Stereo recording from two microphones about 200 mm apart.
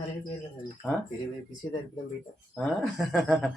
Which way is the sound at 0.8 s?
Centre (ahead or behind).